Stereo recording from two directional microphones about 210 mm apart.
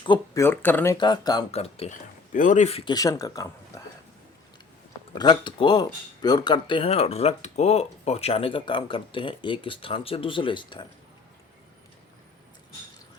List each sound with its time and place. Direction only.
0.0 s speech: 20° left (ahead or behind)
0.4 s speech: 10° left (ahead or behind)
0.9 s speech: 20° left (ahead or behind)
5.1 s speech: 20° left (ahead or behind)